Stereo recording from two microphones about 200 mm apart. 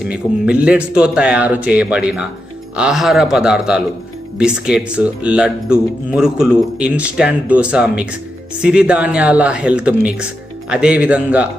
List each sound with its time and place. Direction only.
0.0 s a man's voice: 5° right (ahead or behind)